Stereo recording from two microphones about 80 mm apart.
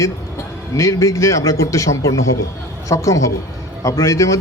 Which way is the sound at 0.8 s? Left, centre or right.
Left.